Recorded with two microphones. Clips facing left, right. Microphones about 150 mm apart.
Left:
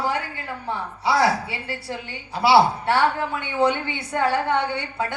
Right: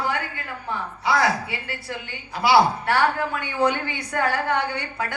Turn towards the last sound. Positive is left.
turn(degrees=25)  # may be behind; listen again after turning